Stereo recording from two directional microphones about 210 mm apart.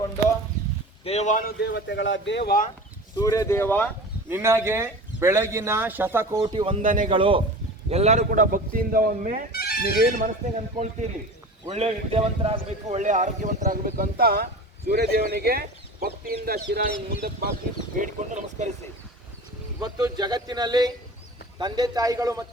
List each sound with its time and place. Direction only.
1.0 s speech: 30° left (ahead or behind); by 2.6 s 45° left (ahead or behind)
3.2 s speech: 15° left (ahead or behind)
4.3 s speech: 10° right (ahead or behind)
6.4 s a man's voice: 25° right (ahead or behind); by 7.1 s 40° right (ahead or behind)
7.1 s a man's voice: 25° right (ahead or behind); by 9.4 s 40° right (ahead or behind)
9.5 s music: 45° left (ahead or behind)
10.2 s a man's voice: 35° right (ahead or behind)
19.8 s a man's voice: 20° right (ahead or behind)